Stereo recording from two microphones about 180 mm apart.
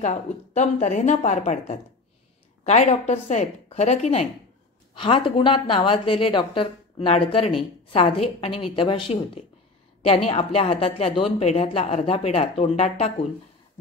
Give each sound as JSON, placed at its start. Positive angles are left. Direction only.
{"t": 0.0, "sound": "a woman's voice", "side_deg": 40}